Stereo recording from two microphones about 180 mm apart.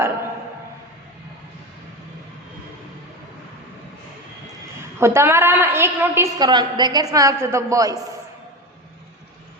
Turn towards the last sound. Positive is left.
turn(degrees=-20)  # may be behind; listen again after turning